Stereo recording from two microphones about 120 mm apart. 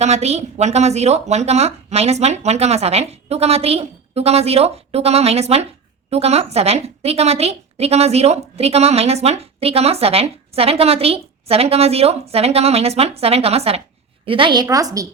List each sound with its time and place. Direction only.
0.0 s a woman's voice: 65° right (ahead or behind)
14.3 s a woman's voice: 45° right (ahead or behind)